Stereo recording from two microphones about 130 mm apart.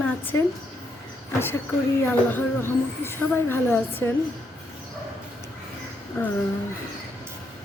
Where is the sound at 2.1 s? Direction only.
15° left (ahead or behind).